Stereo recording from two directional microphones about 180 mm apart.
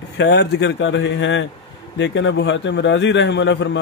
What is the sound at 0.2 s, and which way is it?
Speech, 70° left (ahead or behind).